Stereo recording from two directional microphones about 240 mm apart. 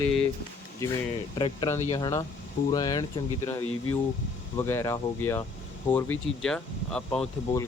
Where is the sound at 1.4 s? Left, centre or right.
Left.